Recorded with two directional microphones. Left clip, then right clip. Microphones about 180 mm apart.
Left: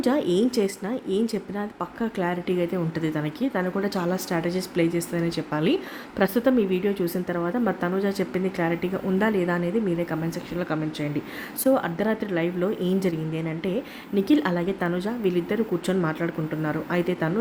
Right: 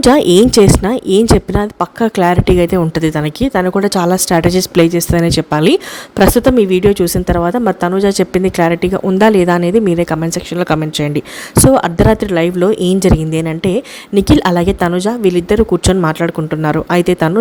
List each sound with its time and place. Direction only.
0.0 s speech: 50° right (ahead or behind)
11.6 s speech: 45° right (ahead or behind)